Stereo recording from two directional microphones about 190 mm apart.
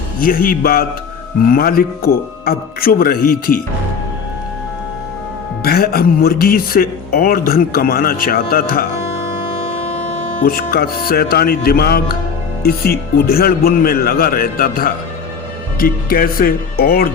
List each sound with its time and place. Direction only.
0.2 s speech: 50° left (ahead or behind)
5.6 s speech: 55° left (ahead or behind)
10.4 s speech: 50° left (ahead or behind)